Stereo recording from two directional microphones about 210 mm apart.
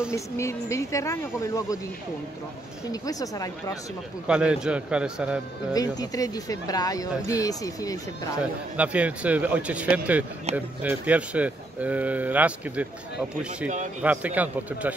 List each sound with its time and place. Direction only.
0.1 s speech: 15° left (ahead or behind)
2.9 s speech: 15° left (ahead or behind)
4.3 s a man's voice: 5° right (ahead or behind)
5.7 s speech: 15° left (ahead or behind)
8.7 s speech: 5° right (ahead or behind)
14.0 s speech: 5° right (ahead or behind)